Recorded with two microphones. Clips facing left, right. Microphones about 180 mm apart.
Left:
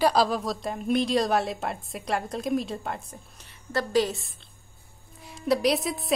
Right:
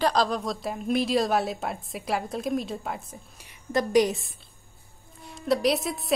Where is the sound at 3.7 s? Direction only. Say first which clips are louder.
Right 3 dB; 15° right (ahead or behind).